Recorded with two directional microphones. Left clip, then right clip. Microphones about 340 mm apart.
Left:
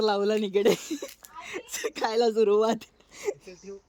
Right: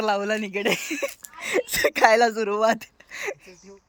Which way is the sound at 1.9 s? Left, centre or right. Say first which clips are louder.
Right 8 dB; right.